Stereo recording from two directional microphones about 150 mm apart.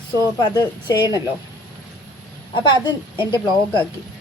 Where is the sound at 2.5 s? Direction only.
30° left (ahead or behind).